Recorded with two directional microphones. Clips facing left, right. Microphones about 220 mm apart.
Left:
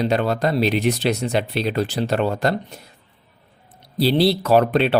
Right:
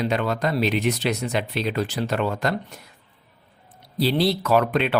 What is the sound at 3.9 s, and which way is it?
Speech, 30° left (ahead or behind).